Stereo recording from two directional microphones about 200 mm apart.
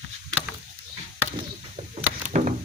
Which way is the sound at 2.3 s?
35° right (ahead or behind).